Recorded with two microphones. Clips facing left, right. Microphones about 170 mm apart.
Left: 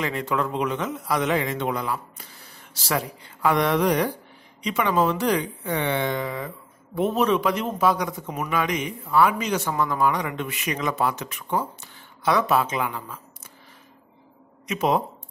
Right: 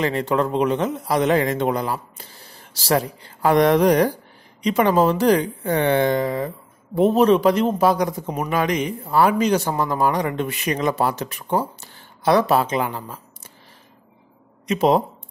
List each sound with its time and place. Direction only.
0.0 s a man's voice: 35° right (ahead or behind)
14.7 s a man's voice: 35° right (ahead or behind)